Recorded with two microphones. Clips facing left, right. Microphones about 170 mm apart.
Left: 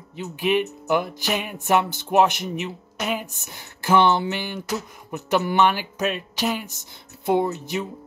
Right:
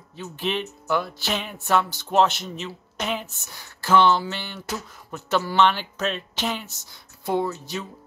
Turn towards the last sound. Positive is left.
turn(degrees=20)  # may be behind; listen again after turning